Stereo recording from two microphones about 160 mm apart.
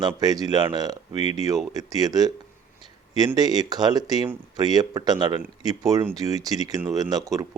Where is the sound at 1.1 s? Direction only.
40° left (ahead or behind).